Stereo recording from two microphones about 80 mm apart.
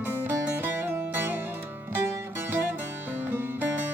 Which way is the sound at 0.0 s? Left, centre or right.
Right.